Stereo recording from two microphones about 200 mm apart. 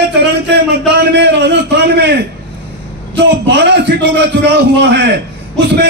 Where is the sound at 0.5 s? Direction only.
60° right (ahead or behind).